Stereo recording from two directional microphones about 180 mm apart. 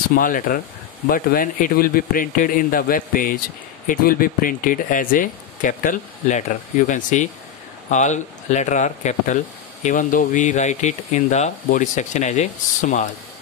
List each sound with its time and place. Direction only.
0.1 s speech: 50° left (ahead or behind)